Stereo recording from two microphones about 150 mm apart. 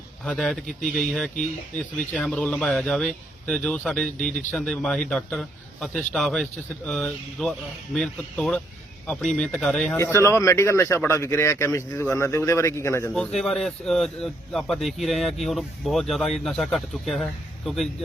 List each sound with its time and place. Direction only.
0.3 s speech: centre (ahead or behind)
10.0 s speech: 20° left (ahead or behind)
13.1 s speech: 5° left (ahead or behind)